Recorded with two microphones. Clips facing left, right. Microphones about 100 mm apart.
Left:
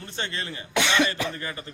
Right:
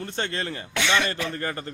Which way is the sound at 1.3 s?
45° right (ahead or behind).